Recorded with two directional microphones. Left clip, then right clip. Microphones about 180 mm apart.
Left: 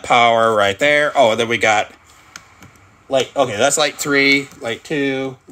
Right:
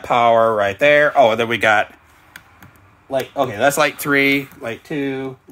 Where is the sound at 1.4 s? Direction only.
5° right (ahead or behind).